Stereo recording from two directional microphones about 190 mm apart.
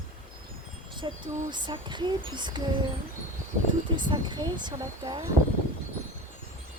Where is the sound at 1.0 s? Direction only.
25° right (ahead or behind).